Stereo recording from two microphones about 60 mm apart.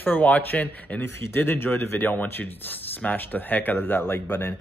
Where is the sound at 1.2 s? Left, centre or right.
Left.